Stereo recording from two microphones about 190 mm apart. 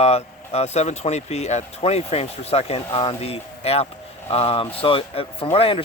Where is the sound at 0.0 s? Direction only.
35° left (ahead or behind).